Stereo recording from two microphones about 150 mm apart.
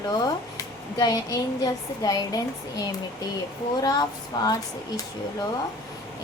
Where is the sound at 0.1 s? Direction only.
25° left (ahead or behind).